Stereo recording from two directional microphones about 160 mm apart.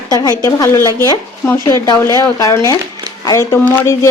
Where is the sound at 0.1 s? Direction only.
25° left (ahead or behind).